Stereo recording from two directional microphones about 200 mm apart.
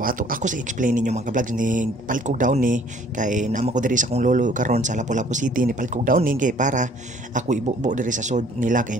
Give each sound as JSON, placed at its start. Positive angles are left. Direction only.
{"t": 0.0, "sound": "speech", "side_deg": -45}